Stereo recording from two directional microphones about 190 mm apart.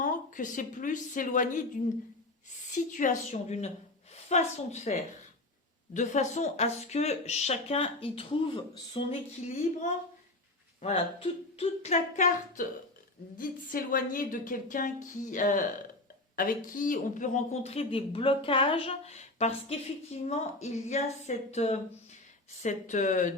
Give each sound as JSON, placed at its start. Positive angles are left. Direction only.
{"t": 0.0, "sound": "a woman's voice", "side_deg": 45}